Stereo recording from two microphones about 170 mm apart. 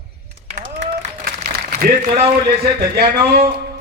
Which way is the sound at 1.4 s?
55° right (ahead or behind).